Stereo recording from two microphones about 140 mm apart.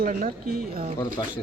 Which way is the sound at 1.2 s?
30° left (ahead or behind).